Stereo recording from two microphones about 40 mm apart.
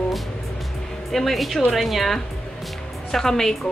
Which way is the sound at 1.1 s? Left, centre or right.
Centre.